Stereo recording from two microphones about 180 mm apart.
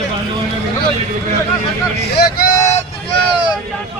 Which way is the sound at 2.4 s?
45° left (ahead or behind).